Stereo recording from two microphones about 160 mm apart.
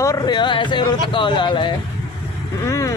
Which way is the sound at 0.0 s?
25° left (ahead or behind).